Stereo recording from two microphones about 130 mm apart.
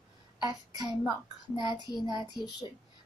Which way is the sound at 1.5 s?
35° left (ahead or behind).